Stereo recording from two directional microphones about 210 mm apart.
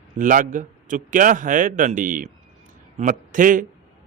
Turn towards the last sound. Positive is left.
turn(degrees=-40)  # may be behind; listen again after turning